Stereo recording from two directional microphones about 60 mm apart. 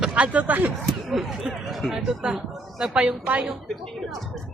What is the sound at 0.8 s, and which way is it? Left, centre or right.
Speech, centre.